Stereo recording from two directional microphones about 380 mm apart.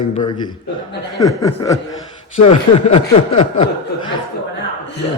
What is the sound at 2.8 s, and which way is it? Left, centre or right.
Speech, centre.